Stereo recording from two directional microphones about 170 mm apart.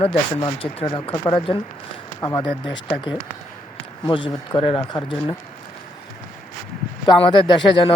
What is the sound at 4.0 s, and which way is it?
Speech, 30° left (ahead or behind).